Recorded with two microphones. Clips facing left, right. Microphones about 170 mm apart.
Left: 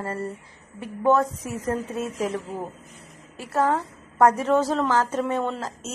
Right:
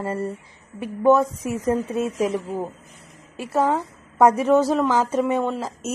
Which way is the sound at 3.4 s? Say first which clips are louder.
Right 2 dB; 15° right (ahead or behind).